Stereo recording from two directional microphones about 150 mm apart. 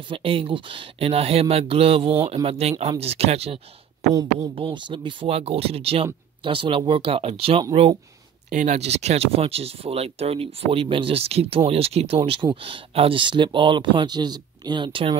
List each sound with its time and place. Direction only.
0.1 s speech: 40° right (ahead or behind)
4.1 s speech: 25° right (ahead or behind)
4.6 s speech: 35° right (ahead or behind)
8.5 s speech: 55° right (ahead or behind); by 15.1 s 35° right (ahead or behind)